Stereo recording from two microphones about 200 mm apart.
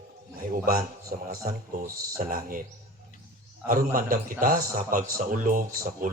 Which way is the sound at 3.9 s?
45° right (ahead or behind).